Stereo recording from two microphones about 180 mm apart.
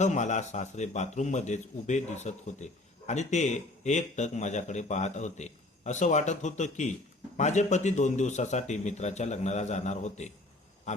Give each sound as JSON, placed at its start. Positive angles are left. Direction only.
{"t": 0.0, "sound": "a man's voice", "side_deg": 40}